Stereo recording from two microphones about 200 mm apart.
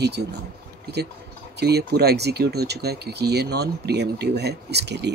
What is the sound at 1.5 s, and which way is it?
Speech, 55° right (ahead or behind).